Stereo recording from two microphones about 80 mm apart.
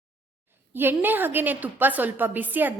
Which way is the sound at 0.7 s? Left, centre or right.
Right.